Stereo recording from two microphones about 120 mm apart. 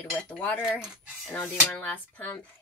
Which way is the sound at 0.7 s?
5° right (ahead or behind).